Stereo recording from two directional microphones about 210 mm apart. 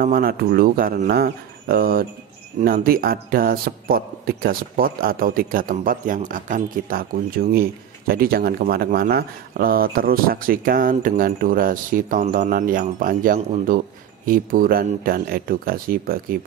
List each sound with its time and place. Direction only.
0.0 s speech: 45° right (ahead or behind)